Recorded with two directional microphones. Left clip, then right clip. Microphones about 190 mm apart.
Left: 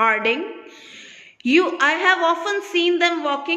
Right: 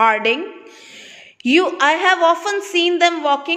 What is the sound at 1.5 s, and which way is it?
A woman's voice, 30° right (ahead or behind).